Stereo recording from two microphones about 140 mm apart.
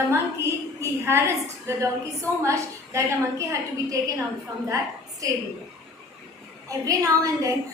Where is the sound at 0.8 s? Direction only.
20° right (ahead or behind).